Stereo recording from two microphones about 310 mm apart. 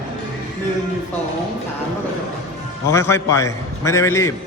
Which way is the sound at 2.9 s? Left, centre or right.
Centre.